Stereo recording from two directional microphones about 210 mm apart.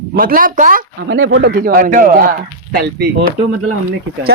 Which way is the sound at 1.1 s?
60° right (ahead or behind).